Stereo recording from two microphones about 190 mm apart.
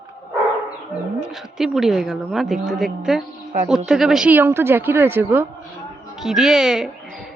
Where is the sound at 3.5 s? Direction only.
40° right (ahead or behind).